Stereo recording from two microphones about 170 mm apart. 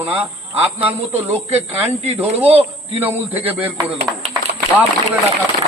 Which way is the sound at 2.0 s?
35° right (ahead or behind).